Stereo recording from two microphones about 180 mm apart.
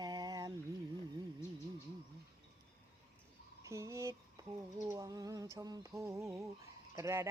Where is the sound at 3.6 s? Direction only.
15° right (ahead or behind).